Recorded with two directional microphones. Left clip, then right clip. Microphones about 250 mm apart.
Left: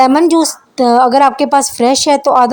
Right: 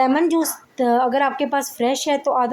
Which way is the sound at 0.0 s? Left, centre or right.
Left.